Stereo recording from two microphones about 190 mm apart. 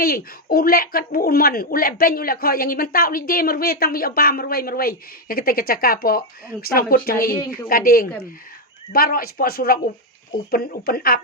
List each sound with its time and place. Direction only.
0.0 s speech: 50° left (ahead or behind)